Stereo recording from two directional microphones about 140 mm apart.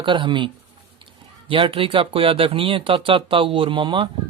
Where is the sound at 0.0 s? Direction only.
35° right (ahead or behind).